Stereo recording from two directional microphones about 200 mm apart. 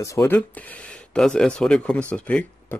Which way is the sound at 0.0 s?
15° left (ahead or behind).